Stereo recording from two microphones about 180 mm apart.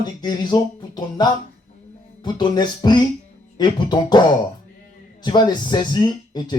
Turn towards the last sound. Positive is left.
turn(degrees=25)  # may be behind; listen again after turning